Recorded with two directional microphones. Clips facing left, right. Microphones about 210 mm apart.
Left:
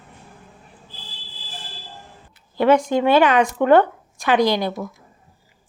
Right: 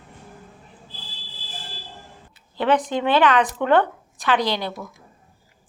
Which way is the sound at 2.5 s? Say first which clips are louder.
Left 5 dB; 10° left (ahead or behind).